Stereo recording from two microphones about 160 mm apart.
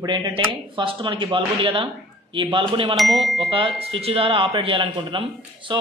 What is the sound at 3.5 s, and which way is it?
A man's voice, 35° right (ahead or behind).